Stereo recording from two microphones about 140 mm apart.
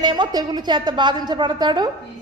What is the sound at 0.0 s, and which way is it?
A woman's voice, 30° right (ahead or behind).